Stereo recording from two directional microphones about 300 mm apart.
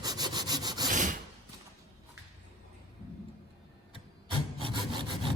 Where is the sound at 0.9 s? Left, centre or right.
Right.